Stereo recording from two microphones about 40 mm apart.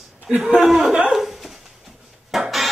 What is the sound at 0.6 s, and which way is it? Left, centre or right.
Speech, centre.